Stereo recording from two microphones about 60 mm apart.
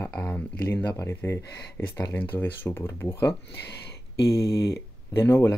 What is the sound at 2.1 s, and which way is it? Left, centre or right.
Speech, left.